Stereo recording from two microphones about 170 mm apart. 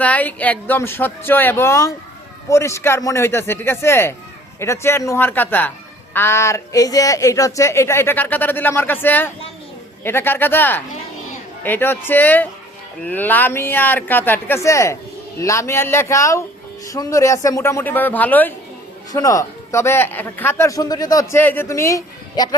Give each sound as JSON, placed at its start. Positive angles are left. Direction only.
{"t": 0.0, "sound": "speech", "side_deg": 10}